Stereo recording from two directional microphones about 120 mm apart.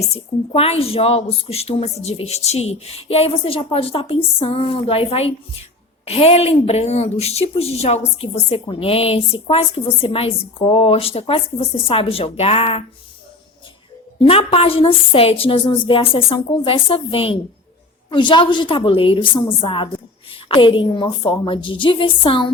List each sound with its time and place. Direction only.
0.1 s a woman's voice: 55° left (ahead or behind)
14.2 s a woman's voice: 55° left (ahead or behind)